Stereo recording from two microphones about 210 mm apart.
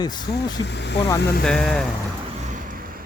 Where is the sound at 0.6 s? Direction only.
55° left (ahead or behind).